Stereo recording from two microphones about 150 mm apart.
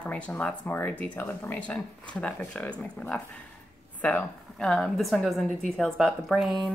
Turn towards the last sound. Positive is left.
turn(degrees=0)  # may be behind; listen again after turning